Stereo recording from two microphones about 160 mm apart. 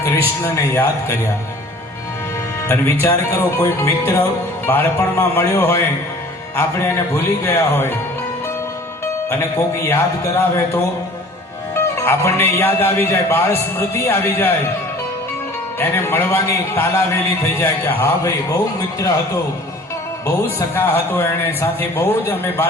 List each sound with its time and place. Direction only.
0.4 s speech: 15° left (ahead or behind)
2.6 s speech: 15° left (ahead or behind)
9.3 s speech: 15° left (ahead or behind)
15.8 s a man's voice: 15° left (ahead or behind)